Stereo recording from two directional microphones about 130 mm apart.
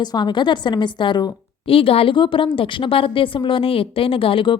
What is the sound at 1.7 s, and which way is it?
A woman's voice, 45° left (ahead or behind).